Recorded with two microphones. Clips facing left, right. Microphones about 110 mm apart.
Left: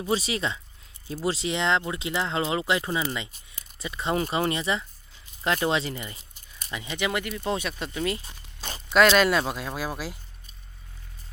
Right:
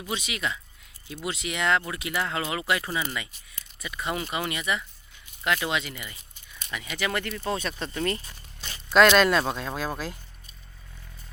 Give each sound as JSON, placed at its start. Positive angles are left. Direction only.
{"t": 0.0, "sound": "speech", "side_deg": 35}